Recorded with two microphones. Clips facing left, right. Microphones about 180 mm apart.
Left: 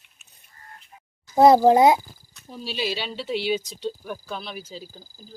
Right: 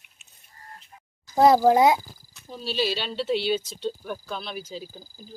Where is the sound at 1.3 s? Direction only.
25° left (ahead or behind).